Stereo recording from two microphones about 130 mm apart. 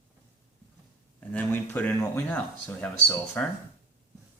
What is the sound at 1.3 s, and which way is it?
Speech, 15° left (ahead or behind).